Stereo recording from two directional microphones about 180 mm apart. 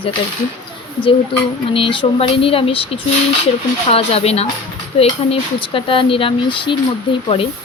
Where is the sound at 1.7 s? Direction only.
30° left (ahead or behind).